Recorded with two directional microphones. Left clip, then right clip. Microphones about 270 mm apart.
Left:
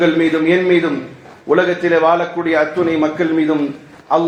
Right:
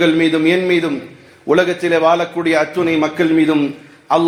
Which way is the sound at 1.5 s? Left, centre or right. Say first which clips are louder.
Even; right.